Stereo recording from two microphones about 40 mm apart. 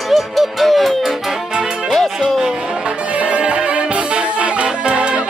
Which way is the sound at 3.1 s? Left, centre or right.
Right.